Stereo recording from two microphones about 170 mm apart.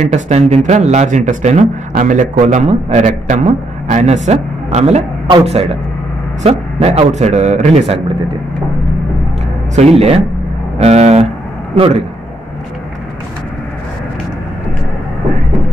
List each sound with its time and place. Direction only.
0.1 s a man's voice: 40° right (ahead or behind)
9.8 s a man's voice: 35° right (ahead or behind)